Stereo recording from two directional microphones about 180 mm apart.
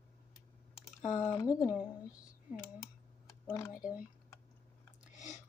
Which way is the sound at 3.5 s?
15° left (ahead or behind).